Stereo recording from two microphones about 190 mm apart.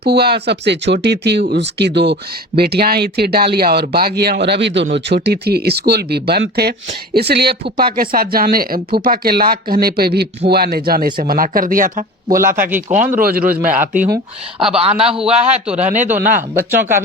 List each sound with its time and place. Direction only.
0.0 s a man's voice: 60° right (ahead or behind); by 14.2 s 40° right (ahead or behind)
14.8 s a man's voice: 30° right (ahead or behind)
15.2 s a man's voice: 5° right (ahead or behind)